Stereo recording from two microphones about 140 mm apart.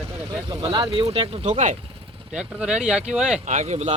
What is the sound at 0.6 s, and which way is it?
Speech, 35° right (ahead or behind).